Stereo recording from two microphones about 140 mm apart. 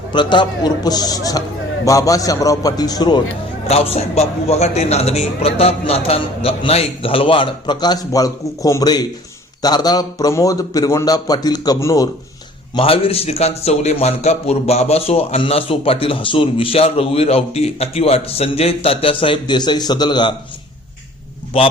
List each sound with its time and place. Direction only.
0.1 s a man's voice: 35° left (ahead or behind)
3.7 s a man's voice: 45° left (ahead or behind); by 12.0 s 25° left (ahead or behind)
12.7 s a man's voice: 40° left (ahead or behind)